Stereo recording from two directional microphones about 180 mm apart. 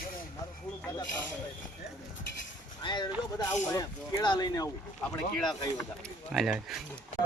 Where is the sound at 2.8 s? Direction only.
25° left (ahead or behind).